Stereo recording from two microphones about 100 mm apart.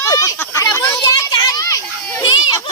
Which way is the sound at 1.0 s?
45° left (ahead or behind).